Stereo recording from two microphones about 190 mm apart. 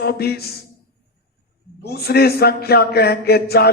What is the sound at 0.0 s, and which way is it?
Speech, 55° left (ahead or behind).